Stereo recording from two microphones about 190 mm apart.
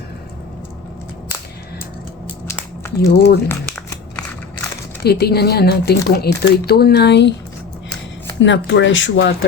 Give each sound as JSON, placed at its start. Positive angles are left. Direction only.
{"t": 2.5, "sound": "a sound", "side_deg": 15}
{"t": 3.1, "sound": "speech", "side_deg": 60}
{"t": 5.0, "sound": "speech", "side_deg": 55}
{"t": 8.4, "sound": "speech", "side_deg": 75}